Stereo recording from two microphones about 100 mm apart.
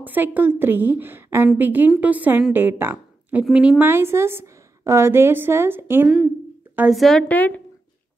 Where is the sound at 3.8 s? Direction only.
25° right (ahead or behind).